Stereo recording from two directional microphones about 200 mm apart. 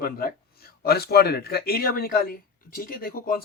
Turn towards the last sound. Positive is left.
turn(degrees=45)  # may be behind; listen again after turning